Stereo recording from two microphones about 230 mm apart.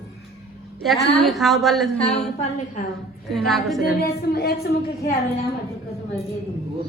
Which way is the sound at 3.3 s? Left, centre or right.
Centre.